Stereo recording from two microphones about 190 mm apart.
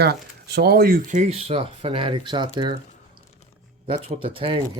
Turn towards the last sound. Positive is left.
turn(degrees=-30)  # may be behind; listen again after turning